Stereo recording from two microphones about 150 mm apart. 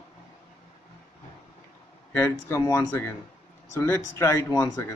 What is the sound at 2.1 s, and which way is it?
Speech, 15° left (ahead or behind).